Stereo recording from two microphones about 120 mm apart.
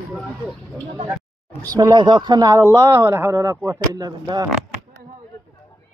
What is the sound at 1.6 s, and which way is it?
A man's voice, 35° right (ahead or behind).